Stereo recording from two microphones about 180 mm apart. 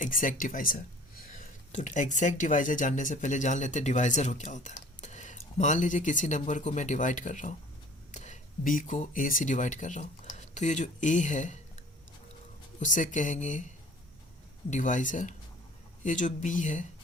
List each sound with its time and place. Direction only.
0.0 s speech: 50° left (ahead or behind)
12.8 s speech: 45° left (ahead or behind)